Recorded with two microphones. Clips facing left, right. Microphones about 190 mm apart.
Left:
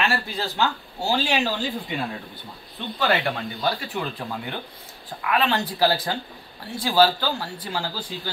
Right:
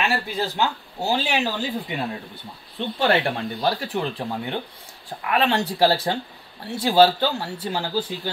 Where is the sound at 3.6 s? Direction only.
30° right (ahead or behind).